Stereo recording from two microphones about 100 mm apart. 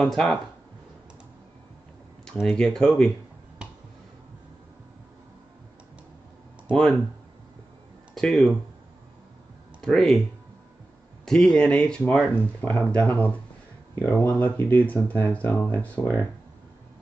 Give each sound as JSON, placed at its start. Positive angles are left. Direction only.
{"t": 0.0, "sound": "speech", "side_deg": 5}
{"t": 2.4, "sound": "speech", "side_deg": 5}
{"t": 6.7, "sound": "speech", "side_deg": 0}
{"t": 8.1, "sound": "speech", "side_deg": 0}
{"t": 9.8, "sound": "speech", "side_deg": 0}
{"t": 11.2, "sound": "speech", "side_deg": 5}